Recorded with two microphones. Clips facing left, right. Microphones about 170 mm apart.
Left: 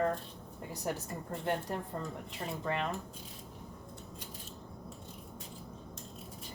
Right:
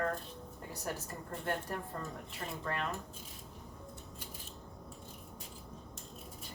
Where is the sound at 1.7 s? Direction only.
25° left (ahead or behind).